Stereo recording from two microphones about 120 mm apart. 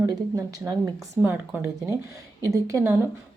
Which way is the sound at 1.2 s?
20° right (ahead or behind).